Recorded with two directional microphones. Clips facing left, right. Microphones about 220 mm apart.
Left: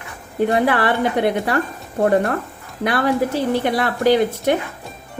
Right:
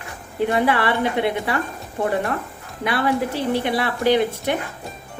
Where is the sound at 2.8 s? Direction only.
45° left (ahead or behind).